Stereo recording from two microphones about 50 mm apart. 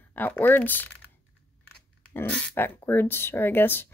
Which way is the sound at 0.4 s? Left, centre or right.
Left.